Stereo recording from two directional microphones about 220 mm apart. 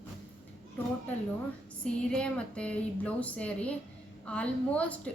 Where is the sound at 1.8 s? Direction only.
5° left (ahead or behind).